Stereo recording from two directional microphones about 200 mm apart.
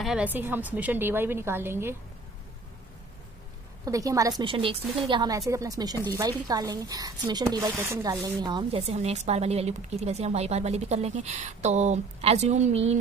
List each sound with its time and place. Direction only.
0.0 s a woman's voice: 5° right (ahead or behind)
3.8 s a woman's voice: 15° right (ahead or behind); by 12.9 s 35° right (ahead or behind)